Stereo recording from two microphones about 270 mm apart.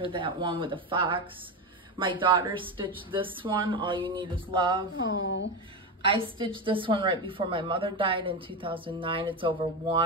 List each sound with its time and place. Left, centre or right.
0.0 s a woman's voice: centre
4.9 s speech: left
6.0 s a woman's voice: centre